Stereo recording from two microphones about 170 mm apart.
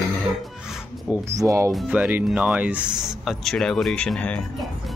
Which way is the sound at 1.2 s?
20° right (ahead or behind).